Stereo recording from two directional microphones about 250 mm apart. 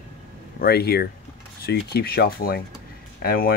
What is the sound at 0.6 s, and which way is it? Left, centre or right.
Speech, left.